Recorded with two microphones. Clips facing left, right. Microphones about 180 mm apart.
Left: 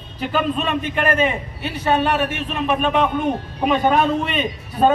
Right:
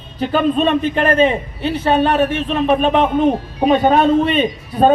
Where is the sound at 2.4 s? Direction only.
35° right (ahead or behind).